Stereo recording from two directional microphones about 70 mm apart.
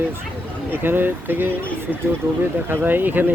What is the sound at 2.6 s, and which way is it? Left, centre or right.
Speech, right.